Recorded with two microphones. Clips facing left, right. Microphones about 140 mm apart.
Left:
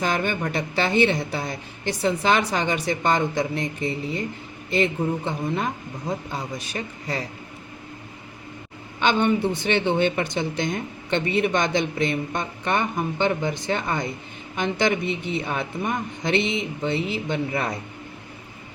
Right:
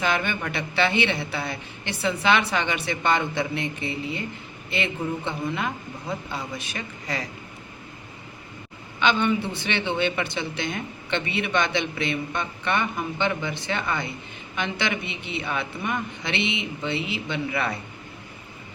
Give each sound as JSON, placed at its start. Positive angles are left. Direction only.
{"t": 0.0, "sound": "a woman's voice", "side_deg": 40}
{"t": 9.0, "sound": "a man's voice", "side_deg": 45}